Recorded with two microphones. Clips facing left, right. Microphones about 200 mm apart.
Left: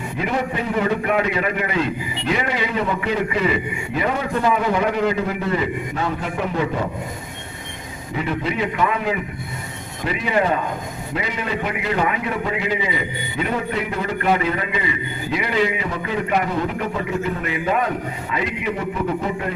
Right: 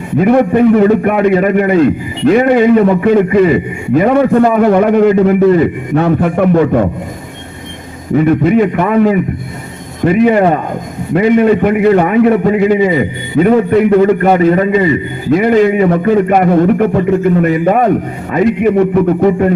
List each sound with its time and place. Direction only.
0.2 s a man's voice: 55° right (ahead or behind)
8.1 s a man's voice: 50° right (ahead or behind)